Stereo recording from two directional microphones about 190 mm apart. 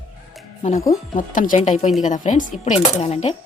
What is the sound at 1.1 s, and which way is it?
Speech, 45° left (ahead or behind).